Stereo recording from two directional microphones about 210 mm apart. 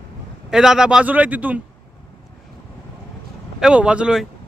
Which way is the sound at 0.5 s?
Centre (ahead or behind).